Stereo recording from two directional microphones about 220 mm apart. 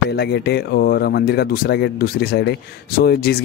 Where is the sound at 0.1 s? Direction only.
50° left (ahead or behind).